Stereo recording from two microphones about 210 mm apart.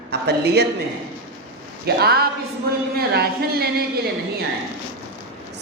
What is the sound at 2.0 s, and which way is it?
A woman's voice, 50° right (ahead or behind).